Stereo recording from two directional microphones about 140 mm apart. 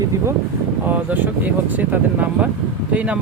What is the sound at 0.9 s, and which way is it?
Speech, 10° right (ahead or behind).